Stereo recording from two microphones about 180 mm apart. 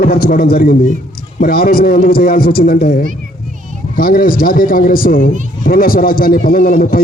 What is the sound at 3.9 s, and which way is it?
A man's voice, 55° left (ahead or behind).